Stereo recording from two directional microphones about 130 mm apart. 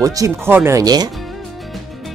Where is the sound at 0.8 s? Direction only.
30° right (ahead or behind).